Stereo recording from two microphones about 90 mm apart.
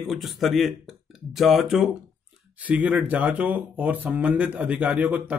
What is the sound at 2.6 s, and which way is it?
A man's voice, 15° right (ahead or behind).